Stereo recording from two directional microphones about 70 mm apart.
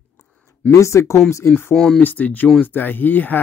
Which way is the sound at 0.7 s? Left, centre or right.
Left.